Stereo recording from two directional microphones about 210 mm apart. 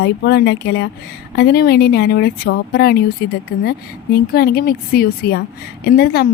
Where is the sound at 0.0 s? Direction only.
55° left (ahead or behind).